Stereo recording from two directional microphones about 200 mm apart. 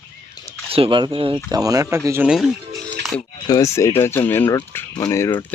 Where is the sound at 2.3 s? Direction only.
Centre (ahead or behind).